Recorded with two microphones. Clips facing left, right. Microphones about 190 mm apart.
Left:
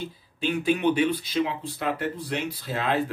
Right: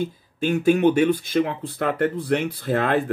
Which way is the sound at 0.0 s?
45° right (ahead or behind).